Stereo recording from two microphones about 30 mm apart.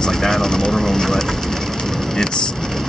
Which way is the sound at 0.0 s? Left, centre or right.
Centre.